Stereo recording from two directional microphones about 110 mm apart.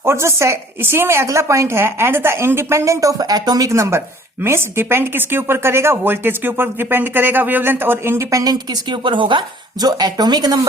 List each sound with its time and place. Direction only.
0.0 s speech: 25° right (ahead or behind)
8.5 s a woman's voice: 45° right (ahead or behind)